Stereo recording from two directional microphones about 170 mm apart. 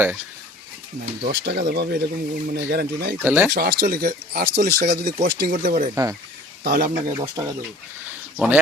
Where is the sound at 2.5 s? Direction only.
65° right (ahead or behind).